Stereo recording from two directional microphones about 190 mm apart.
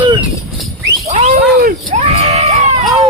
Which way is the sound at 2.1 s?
35° right (ahead or behind).